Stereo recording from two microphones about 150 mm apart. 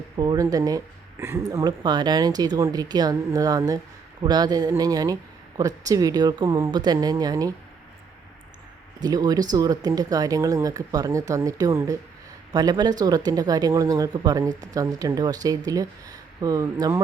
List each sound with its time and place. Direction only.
0.2 s speech: 25° right (ahead or behind)
9.0 s speech: 25° right (ahead or behind)